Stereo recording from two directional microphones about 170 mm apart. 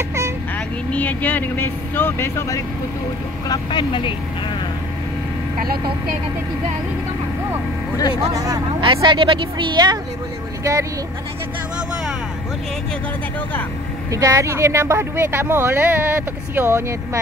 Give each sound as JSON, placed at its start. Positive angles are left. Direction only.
{"t": 0.9, "sound": "speech", "side_deg": 10}
{"t": 3.4, "sound": "speech", "side_deg": 30}
{"t": 8.3, "sound": "a woman's voice", "side_deg": -20}
{"t": 8.8, "sound": "a woman's voice", "side_deg": -30}
{"t": 14.1, "sound": "speech", "side_deg": -20}